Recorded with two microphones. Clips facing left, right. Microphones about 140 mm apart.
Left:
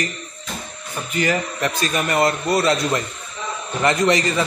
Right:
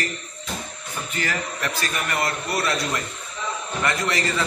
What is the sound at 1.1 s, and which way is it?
A man's voice, 20° left (ahead or behind).